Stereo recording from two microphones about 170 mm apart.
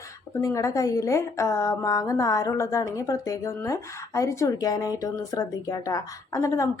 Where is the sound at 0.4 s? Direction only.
20° left (ahead or behind).